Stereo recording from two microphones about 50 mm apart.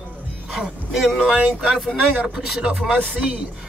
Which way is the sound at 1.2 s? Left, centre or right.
Centre.